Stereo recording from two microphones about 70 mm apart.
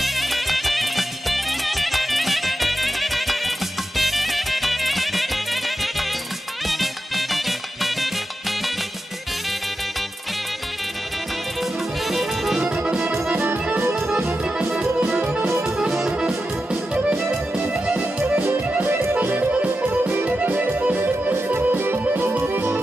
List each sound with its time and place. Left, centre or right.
0.0 s music: centre
12.1 s music: centre
12.6 s accordion: centre
13.9 s music: centre; by 22.8 s right